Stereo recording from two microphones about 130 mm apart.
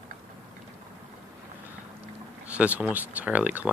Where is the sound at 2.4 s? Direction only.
10° right (ahead or behind).